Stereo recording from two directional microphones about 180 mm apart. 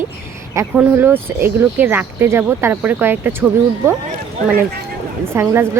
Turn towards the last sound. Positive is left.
turn(degrees=-15)  # may be behind; listen again after turning